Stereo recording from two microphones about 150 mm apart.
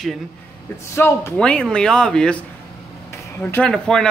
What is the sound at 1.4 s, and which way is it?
Speech, 5° left (ahead or behind).